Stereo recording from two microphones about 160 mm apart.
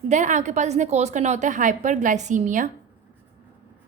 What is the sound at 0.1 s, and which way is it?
A woman's voice, 50° right (ahead or behind).